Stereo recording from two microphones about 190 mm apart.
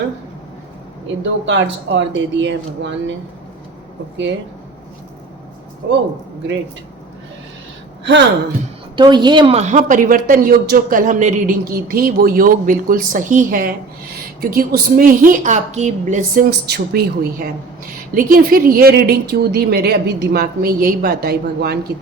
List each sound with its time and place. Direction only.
1.0 s speech: 75° right (ahead or behind)
5.8 s speech: 55° right (ahead or behind)
8.0 s speech: 65° right (ahead or behind)
9.0 s a woman's voice: 25° right (ahead or behind)
9.6 s a man's voice: 40° right (ahead or behind); by 21.8 s 55° right (ahead or behind)